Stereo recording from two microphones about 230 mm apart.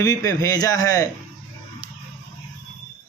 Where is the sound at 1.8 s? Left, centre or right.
Centre.